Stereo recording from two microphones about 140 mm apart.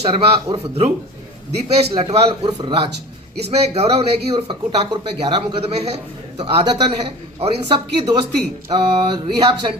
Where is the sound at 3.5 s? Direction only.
50° right (ahead or behind).